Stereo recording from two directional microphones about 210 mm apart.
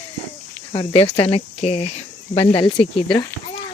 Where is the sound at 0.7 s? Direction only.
30° left (ahead or behind).